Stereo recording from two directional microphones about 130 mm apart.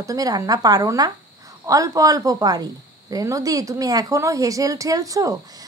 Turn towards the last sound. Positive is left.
turn(degrees=-25)  # may be behind; listen again after turning